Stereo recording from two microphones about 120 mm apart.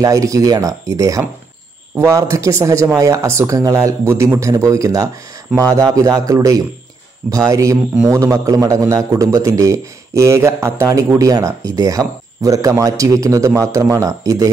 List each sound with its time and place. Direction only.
0.0 s a man's voice: 30° right (ahead or behind)